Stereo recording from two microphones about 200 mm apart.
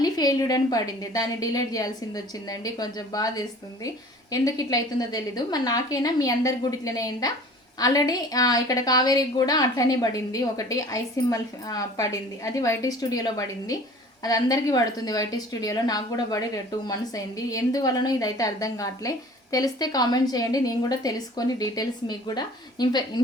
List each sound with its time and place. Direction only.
0.0 s a woman's voice: 20° left (ahead or behind)